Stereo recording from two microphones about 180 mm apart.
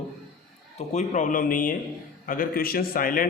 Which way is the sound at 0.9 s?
40° left (ahead or behind).